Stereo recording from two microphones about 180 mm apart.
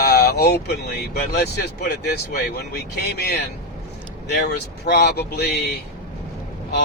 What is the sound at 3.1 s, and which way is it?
Speech, 65° left (ahead or behind).